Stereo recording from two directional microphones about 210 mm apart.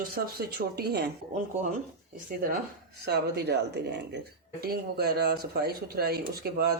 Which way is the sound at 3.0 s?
50° right (ahead or behind).